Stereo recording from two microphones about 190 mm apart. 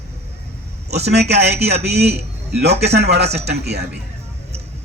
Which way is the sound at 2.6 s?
60° right (ahead or behind).